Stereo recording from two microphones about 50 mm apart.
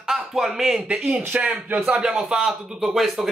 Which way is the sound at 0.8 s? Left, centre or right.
Centre.